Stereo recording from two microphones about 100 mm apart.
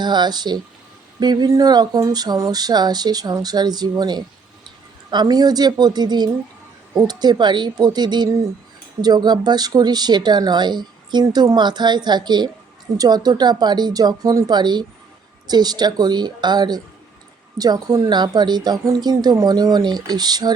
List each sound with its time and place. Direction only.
0.0 s speech: 45° right (ahead or behind)
1.2 s a sound: 45° right (ahead or behind)
2.5 s speech: 40° right (ahead or behind)